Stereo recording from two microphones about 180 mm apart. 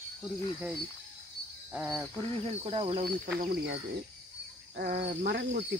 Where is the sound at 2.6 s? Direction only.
30° right (ahead or behind).